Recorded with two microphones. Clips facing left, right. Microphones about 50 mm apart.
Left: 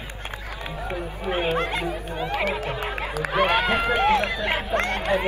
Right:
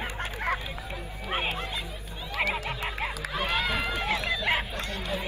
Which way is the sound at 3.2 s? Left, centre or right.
Left.